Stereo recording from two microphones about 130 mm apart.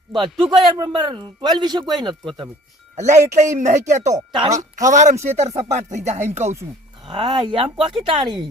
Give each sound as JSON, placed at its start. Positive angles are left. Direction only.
{"t": 0.1, "sound": "a man's voice", "side_deg": -40}
{"t": 2.9, "sound": "speech", "side_deg": -60}
{"t": 5.2, "sound": "music", "side_deg": -60}
{"t": 7.1, "sound": "a man's voice", "side_deg": -40}